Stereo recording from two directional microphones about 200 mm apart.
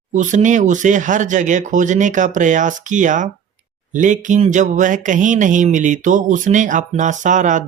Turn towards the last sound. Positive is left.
turn(degrees=-40)  # may be behind; listen again after turning